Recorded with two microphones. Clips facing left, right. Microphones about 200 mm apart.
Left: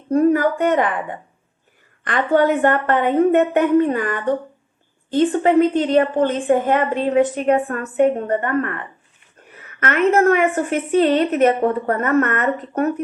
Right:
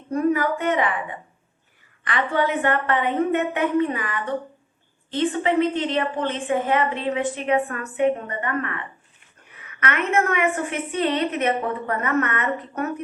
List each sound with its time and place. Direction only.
0.1 s a woman's voice: 35° left (ahead or behind)
9.8 s a woman's voice: 40° left (ahead or behind)